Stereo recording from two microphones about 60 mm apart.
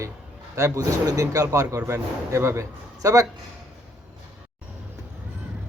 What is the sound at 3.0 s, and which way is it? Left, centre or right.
Speech, right.